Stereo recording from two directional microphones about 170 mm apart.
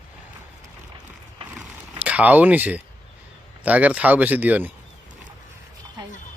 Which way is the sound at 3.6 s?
10° right (ahead or behind).